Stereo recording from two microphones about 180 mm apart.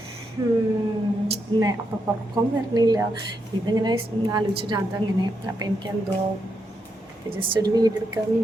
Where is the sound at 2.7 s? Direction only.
20° right (ahead or behind).